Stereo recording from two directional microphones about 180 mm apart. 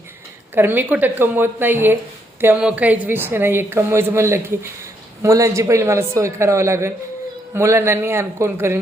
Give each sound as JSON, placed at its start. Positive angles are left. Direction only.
{"t": 0.5, "sound": "speech", "side_deg": -10}